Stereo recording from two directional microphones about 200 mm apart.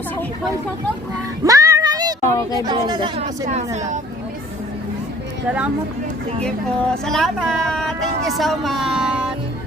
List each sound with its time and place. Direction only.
1.5 s music: 20° right (ahead or behind)
2.2 s speech: 15° left (ahead or behind)
2.6 s a woman's voice: 20° right (ahead or behind)
6.4 s speech: 5° left (ahead or behind)